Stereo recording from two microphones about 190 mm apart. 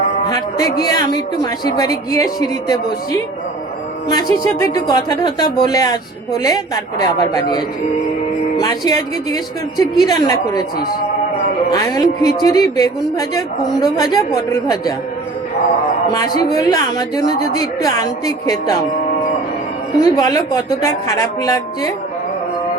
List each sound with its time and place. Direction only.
0.3 s a woman's voice: 20° left (ahead or behind)
11.7 s a woman's voice: 20° left (ahead or behind)
16.1 s a woman's voice: 20° left (ahead or behind)
20.0 s a woman's voice: 20° left (ahead or behind)